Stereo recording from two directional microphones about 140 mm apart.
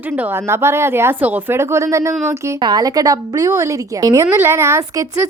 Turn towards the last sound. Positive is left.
turn(degrees=-20)  # may be behind; listen again after turning